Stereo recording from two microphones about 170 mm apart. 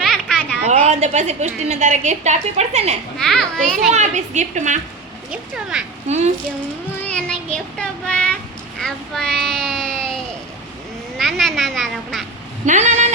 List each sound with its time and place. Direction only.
0.0 s a sound: 5° left (ahead or behind)
0.9 s a woman's voice: 40° right (ahead or behind)
3.2 s a child's voice: 5° left (ahead or behind)
3.9 s a woman's voice: 45° right (ahead or behind)
5.3 s a child's voice: 5° right (ahead or behind)
6.1 s a woman's voice: 40° right (ahead or behind)
7.1 s child singing: 5° left (ahead or behind)
8.8 s speech: 5° left (ahead or behind)
11.2 s a sound: centre (ahead or behind)
12.6 s speech: 45° right (ahead or behind)